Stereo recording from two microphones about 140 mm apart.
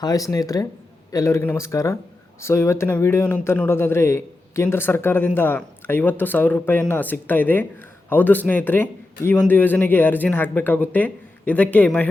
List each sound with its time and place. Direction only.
0.0 s a man's voice: 25° left (ahead or behind); by 12.0 s 10° left (ahead or behind)